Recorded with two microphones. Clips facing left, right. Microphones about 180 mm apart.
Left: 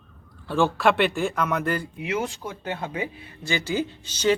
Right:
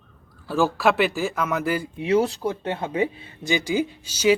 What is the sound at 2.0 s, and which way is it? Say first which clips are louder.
Speech: right 7 dB; 35° right (ahead or behind).